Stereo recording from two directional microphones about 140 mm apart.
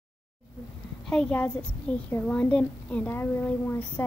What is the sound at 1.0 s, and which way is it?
A woman's voice, 5° left (ahead or behind).